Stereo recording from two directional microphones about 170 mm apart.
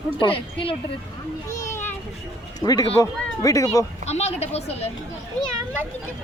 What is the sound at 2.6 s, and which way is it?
Speech, 20° left (ahead or behind).